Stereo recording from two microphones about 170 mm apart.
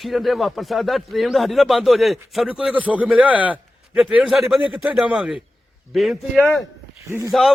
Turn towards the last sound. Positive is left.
turn(degrees=-20)  # may be behind; listen again after turning